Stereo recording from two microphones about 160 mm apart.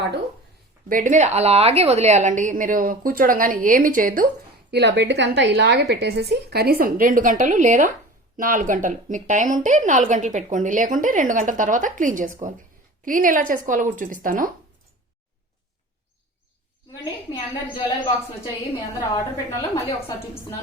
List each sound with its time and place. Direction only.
0.9 s a woman's voice: 55° right (ahead or behind)
4.7 s a woman's voice: 90° right; by 14.5 s 60° right (ahead or behind)
17.0 s a woman's voice: 30° left (ahead or behind)
19.1 s a woman's voice: 20° left (ahead or behind)